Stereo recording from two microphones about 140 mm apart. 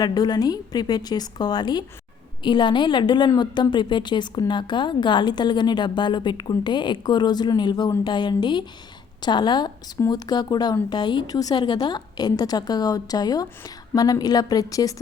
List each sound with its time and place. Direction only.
0.0 s a woman's voice: 30° left (ahead or behind)